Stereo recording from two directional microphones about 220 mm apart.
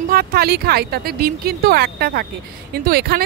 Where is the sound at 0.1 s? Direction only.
45° right (ahead or behind).